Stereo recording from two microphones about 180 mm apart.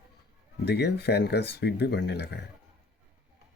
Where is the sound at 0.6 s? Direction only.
65° left (ahead or behind).